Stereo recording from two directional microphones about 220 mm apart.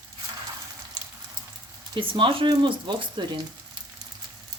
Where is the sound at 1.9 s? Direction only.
20° right (ahead or behind).